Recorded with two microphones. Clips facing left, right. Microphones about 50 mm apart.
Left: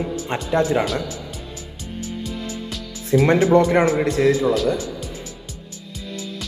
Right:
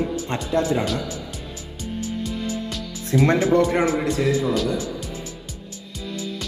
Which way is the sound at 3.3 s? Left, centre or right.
Left.